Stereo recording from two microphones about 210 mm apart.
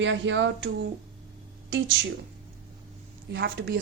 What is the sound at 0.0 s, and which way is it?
Speech, 60° right (ahead or behind).